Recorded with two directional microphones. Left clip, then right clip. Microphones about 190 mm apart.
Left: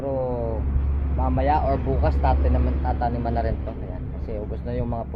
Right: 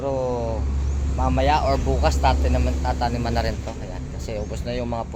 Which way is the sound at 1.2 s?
25° right (ahead or behind).